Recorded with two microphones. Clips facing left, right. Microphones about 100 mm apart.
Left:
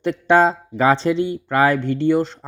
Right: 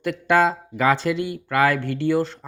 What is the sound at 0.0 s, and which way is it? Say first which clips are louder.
Speech: left 3 dB; 30° left (ahead or behind).